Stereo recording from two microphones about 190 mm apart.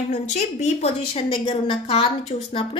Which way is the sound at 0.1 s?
40° left (ahead or behind).